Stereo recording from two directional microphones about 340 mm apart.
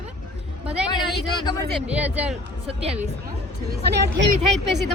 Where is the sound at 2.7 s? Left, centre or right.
Centre.